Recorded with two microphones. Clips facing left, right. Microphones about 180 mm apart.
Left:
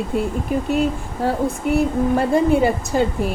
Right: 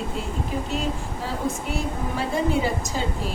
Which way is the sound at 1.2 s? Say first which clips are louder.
Left 8 dB; 55° left (ahead or behind).